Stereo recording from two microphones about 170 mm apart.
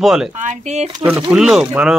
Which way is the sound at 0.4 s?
45° right (ahead or behind).